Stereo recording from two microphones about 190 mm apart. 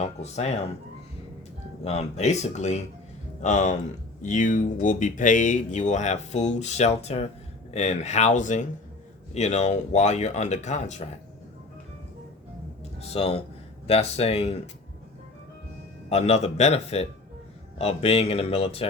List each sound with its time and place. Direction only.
0.0 s speech: 35° left (ahead or behind)
1.8 s speech: 35° left (ahead or behind)
13.0 s speech: 30° left (ahead or behind)
16.0 s speech: 35° left (ahead or behind)